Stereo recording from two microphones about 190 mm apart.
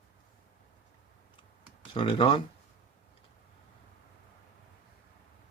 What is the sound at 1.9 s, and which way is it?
Speech, 25° left (ahead or behind).